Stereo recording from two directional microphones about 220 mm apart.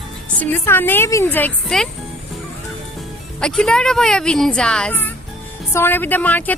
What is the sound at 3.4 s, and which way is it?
Speech, 5° left (ahead or behind).